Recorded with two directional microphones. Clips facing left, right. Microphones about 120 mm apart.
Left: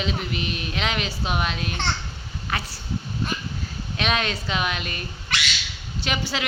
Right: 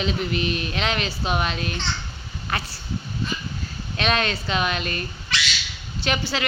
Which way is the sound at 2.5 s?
Centre (ahead or behind).